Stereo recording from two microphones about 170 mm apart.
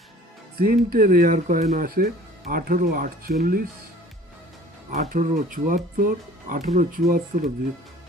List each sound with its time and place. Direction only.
0.6 s speech: 60° right (ahead or behind)
4.9 s speech: 45° right (ahead or behind)